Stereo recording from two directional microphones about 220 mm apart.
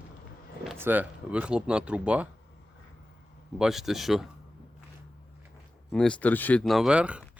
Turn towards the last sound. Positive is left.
turn(degrees=-5)  # may be behind; listen again after turning